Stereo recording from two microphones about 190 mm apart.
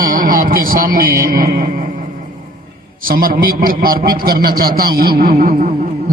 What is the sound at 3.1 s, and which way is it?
A man's voice, 50° right (ahead or behind).